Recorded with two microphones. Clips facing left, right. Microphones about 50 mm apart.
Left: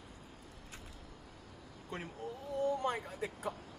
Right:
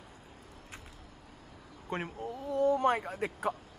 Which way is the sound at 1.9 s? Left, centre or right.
Right.